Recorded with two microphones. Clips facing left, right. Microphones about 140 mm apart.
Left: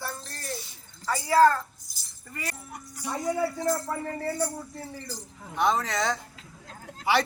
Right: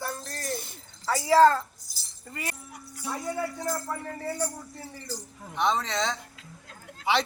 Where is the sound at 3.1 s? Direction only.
Centre (ahead or behind).